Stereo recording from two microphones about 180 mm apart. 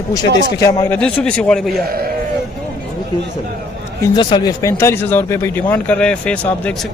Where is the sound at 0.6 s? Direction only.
15° left (ahead or behind).